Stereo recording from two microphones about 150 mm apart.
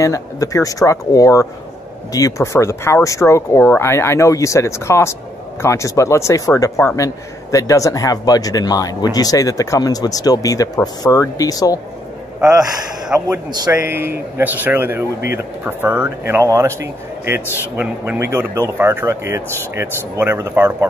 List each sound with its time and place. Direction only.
0.0 s speech: 20° left (ahead or behind)
13.3 s speech: 25° right (ahead or behind)
13.7 s speech: 15° right (ahead or behind)